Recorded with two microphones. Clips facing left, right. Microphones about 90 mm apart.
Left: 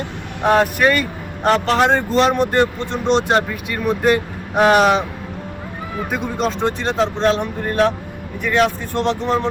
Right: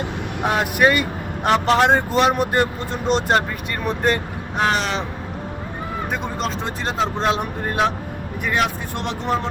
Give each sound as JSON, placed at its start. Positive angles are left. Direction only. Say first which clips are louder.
{"t": 0.6, "sound": "a man's voice", "louder": "left 1 dB", "side_deg": -15}
{"t": 3.1, "sound": "speech", "louder": "left 2 dB", "side_deg": 0}
{"t": 4.7, "sound": "speech", "louder": "left 9 dB", "side_deg": 60}
{"t": 6.1, "sound": "a man's voice", "louder": "left 5 dB", "side_deg": 0}